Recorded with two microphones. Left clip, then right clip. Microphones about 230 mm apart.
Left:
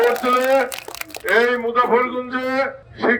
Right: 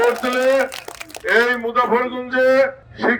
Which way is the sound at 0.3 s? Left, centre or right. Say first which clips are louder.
Even; right.